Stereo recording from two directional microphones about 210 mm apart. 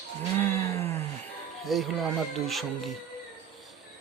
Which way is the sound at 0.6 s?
30° right (ahead or behind).